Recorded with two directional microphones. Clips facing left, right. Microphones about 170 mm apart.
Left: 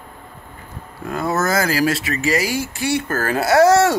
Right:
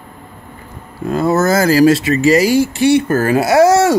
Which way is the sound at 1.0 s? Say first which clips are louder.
Right 7 dB; 25° right (ahead or behind).